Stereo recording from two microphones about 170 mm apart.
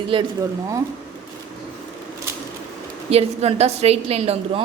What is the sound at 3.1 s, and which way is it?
A woman's voice, 40° right (ahead or behind).